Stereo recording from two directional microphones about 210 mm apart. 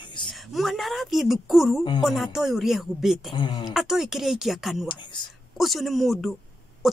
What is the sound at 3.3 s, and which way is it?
Speech, 20° left (ahead or behind).